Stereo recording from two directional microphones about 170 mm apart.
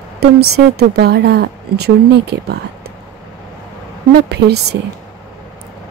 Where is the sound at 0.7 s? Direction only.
70° right (ahead or behind).